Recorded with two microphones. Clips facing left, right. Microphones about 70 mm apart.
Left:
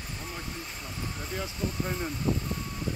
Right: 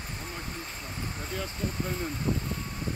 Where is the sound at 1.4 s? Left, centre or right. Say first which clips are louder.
Left 1 dB; centre.